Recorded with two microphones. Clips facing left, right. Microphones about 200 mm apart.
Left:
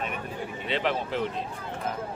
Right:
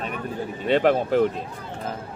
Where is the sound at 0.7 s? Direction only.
50° right (ahead or behind).